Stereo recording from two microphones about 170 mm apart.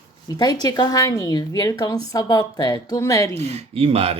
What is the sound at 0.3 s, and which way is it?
Speech, 25° left (ahead or behind).